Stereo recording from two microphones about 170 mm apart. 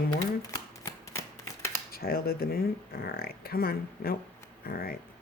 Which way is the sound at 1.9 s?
60° left (ahead or behind).